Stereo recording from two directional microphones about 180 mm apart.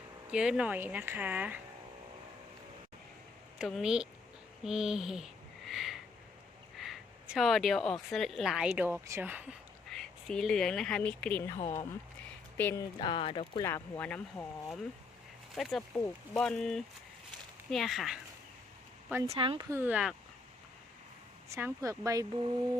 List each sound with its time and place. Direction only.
0.3 s speech: 5° right (ahead or behind)
3.6 s a woman's voice: 5° right (ahead or behind)
8.7 s speech: 15° right (ahead or behind)
9.9 s speech: 5° left (ahead or behind)
11.5 s speech: 40° left (ahead or behind)
12.5 s speech: 10° left (ahead or behind)
13.0 s speech: 30° left (ahead or behind)
13.7 s speech: 10° left (ahead or behind)
19.3 s speech: 30° right (ahead or behind)
19.7 s speech: 10° right (ahead or behind)
21.5 s speech: 15° right (ahead or behind)